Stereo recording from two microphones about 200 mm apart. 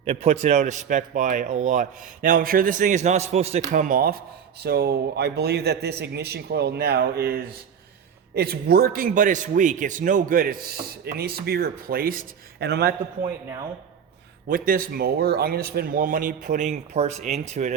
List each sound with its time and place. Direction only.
0.0 s speech: 30° right (ahead or behind); by 12.9 s 55° right (ahead or behind)
14.4 s speech: 45° right (ahead or behind)